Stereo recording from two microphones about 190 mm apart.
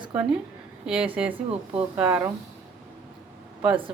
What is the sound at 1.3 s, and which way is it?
Speech, 30° right (ahead or behind).